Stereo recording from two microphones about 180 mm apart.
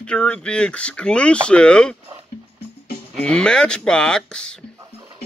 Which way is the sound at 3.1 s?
5° left (ahead or behind).